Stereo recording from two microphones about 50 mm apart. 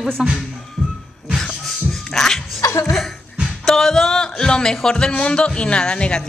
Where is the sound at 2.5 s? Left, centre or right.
Left.